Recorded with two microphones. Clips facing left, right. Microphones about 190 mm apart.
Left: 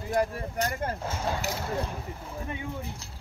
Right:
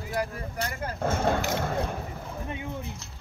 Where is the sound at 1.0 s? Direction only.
55° right (ahead or behind).